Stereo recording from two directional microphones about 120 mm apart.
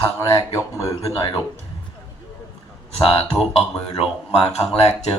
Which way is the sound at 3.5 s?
55° left (ahead or behind).